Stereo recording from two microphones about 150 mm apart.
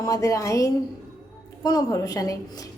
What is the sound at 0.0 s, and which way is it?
A woman's voice, 20° left (ahead or behind).